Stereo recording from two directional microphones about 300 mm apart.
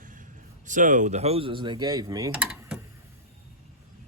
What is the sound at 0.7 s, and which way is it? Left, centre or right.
Mechanisms, right.